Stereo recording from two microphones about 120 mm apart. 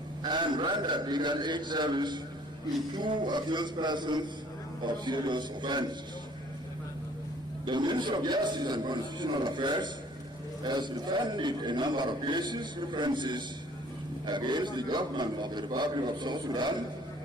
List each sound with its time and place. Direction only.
0.2 s a man's voice: 40° right (ahead or behind)
7.7 s a man's voice: 40° right (ahead or behind)